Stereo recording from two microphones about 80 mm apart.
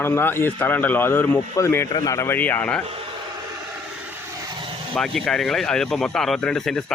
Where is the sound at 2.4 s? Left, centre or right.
Centre.